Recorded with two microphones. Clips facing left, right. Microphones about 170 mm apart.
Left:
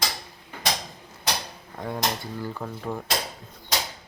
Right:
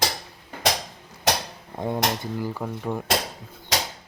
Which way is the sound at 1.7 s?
20° right (ahead or behind).